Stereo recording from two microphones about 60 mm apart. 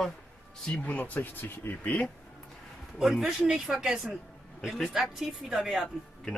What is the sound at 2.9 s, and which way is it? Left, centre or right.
Speech, centre.